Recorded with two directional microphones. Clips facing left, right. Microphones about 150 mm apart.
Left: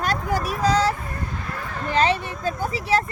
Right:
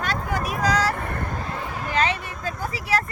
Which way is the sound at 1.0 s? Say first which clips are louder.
Right 3 dB; 60° right (ahead or behind).